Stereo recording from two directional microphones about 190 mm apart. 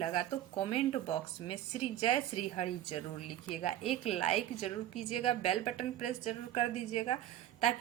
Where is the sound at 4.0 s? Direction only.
35° left (ahead or behind).